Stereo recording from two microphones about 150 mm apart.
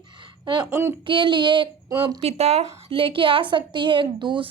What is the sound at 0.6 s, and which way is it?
Speech, 15° right (ahead or behind).